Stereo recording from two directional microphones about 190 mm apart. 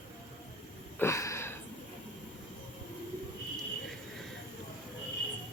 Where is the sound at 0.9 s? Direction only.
15° left (ahead or behind).